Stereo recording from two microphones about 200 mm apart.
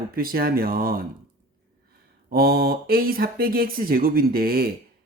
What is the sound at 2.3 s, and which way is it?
Speech, 50° right (ahead or behind).